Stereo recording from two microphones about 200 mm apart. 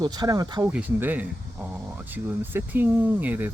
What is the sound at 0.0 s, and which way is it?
Speech, 20° right (ahead or behind).